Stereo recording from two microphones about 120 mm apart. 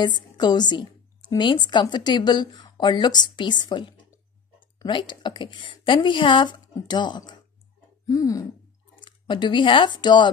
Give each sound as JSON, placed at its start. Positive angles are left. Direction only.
{"t": 0.0, "sound": "a woman's voice", "side_deg": 35}
{"t": 8.1, "sound": "a sound", "side_deg": 30}
{"t": 9.0, "sound": "speech", "side_deg": 40}